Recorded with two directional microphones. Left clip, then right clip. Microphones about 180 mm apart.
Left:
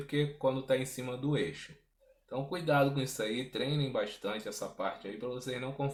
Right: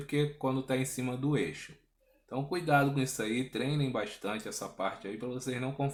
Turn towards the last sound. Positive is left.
turn(degrees=-35)  # may be behind; listen again after turning